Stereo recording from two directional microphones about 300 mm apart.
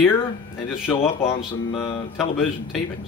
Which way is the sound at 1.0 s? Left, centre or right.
Centre.